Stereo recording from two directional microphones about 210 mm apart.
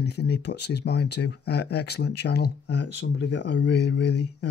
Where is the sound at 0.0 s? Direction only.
55° left (ahead or behind).